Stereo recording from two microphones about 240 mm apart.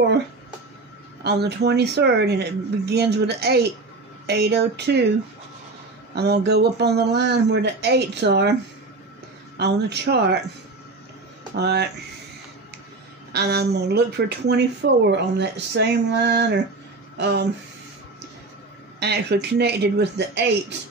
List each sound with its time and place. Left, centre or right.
1.2 s speech: right
6.1 s speech: right
9.6 s speech: right
11.5 s speech: right
13.3 s speech: right
18.9 s speech: right